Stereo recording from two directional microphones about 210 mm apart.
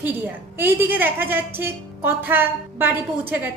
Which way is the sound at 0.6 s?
10° right (ahead or behind).